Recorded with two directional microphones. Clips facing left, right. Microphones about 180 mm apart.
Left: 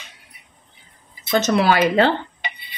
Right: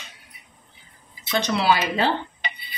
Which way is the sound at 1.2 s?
45° left (ahead or behind).